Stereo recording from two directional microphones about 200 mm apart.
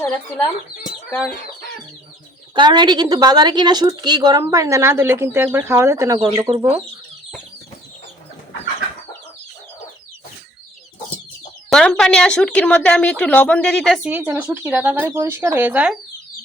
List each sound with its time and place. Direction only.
2.6 s a woman's voice: 20° right (ahead or behind)
11.7 s speech: 5° left (ahead or behind)